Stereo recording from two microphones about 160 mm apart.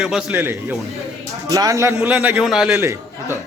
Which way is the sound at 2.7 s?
20° right (ahead or behind).